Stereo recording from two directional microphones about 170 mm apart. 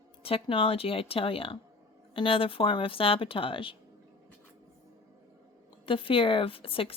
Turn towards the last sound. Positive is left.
turn(degrees=35)  # may be behind; listen again after turning